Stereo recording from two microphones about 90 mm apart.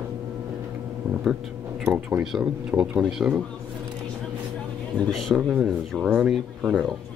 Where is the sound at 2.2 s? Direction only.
5° right (ahead or behind).